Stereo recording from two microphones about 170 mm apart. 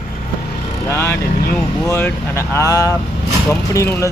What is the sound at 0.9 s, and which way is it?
Speech, 15° left (ahead or behind).